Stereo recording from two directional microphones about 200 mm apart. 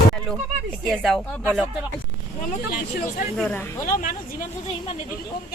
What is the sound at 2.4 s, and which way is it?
Speech, 40° left (ahead or behind).